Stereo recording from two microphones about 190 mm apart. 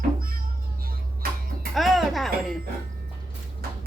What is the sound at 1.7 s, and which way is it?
Music, centre (ahead or behind).